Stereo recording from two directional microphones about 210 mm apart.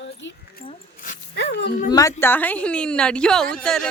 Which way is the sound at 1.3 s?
55° left (ahead or behind).